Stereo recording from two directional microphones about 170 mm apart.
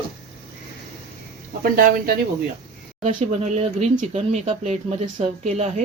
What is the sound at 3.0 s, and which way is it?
A woman's voice, 40° right (ahead or behind).